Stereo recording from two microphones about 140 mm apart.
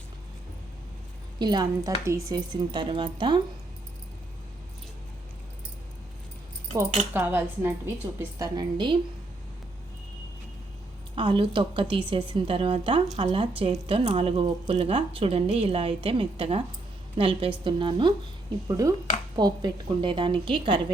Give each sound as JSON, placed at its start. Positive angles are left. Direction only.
{"t": 1.4, "sound": "a woman's voice", "side_deg": -30}
{"t": 2.5, "sound": "speech", "side_deg": -35}
{"t": 7.1, "sound": "speech", "side_deg": -15}
{"t": 8.2, "sound": "a woman's voice", "side_deg": -25}
{"t": 11.1, "sound": "speech", "side_deg": -35}
{"t": 18.7, "sound": "a woman's voice", "side_deg": -25}
{"t": 19.4, "sound": "speech", "side_deg": -35}